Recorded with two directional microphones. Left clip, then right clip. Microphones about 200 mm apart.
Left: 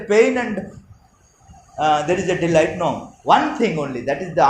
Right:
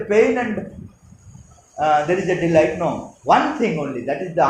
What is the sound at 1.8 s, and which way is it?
A man's voice, 40° left (ahead or behind).